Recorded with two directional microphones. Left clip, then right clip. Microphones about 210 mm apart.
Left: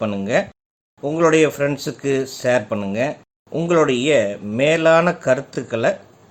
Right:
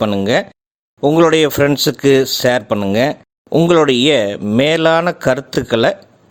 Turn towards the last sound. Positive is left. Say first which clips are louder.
# right 6 dB
turn(degrees=-45)  # may be behind; listen again after turning